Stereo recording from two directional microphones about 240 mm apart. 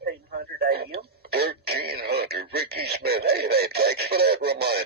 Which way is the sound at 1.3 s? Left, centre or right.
Right.